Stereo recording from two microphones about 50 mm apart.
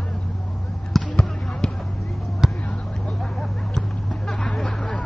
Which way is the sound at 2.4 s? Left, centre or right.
Centre.